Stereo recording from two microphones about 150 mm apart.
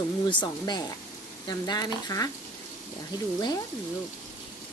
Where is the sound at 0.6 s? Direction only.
25° left (ahead or behind).